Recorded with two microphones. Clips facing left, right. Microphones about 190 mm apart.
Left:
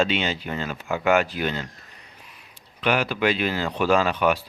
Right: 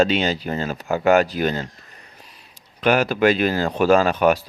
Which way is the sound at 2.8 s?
45° right (ahead or behind).